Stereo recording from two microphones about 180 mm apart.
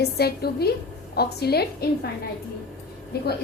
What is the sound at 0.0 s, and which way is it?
A woman's voice, 60° left (ahead or behind).